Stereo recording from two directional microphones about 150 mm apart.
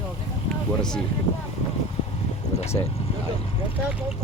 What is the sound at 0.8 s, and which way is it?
Speech, 5° left (ahead or behind).